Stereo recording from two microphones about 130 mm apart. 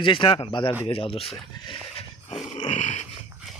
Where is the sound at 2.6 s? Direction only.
60° left (ahead or behind).